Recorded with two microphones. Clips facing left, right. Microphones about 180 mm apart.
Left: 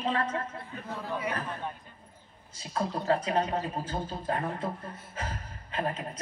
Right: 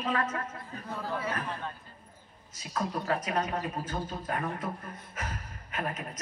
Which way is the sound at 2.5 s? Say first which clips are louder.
Left 1 dB; 30° left (ahead or behind).